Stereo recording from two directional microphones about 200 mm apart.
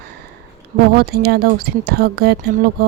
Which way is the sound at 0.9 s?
50° right (ahead or behind).